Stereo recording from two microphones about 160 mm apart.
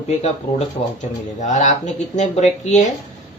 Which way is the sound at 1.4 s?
45° left (ahead or behind).